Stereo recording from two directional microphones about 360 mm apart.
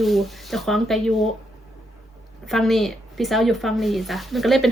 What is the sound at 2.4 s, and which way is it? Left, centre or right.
Speech, centre.